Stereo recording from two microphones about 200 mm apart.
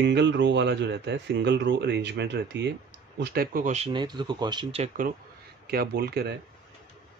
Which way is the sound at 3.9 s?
20° right (ahead or behind).